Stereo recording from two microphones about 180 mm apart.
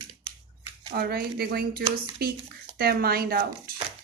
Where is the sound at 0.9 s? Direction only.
60° right (ahead or behind).